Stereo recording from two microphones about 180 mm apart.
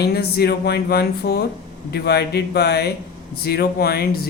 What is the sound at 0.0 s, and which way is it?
A woman's voice, 60° left (ahead or behind).